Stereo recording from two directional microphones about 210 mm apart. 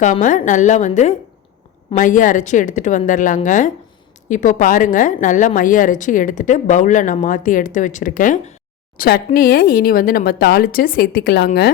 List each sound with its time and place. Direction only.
0.0 s a woman's voice: 35° left (ahead or behind)